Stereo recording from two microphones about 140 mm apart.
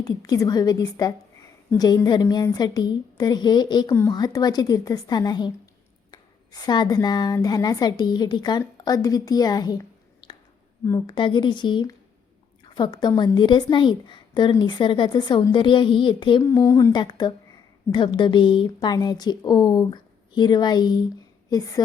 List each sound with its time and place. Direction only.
0.0 s a woman's voice: 25° left (ahead or behind)
10.8 s a woman's voice: 30° left (ahead or behind)
16.4 s a woman's voice: 20° left (ahead or behind)